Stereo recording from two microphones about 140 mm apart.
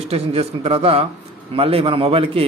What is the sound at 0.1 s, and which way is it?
A man's voice, 45° right (ahead or behind).